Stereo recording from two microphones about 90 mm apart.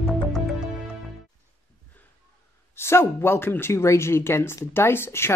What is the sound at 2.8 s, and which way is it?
Speech, 30° left (ahead or behind).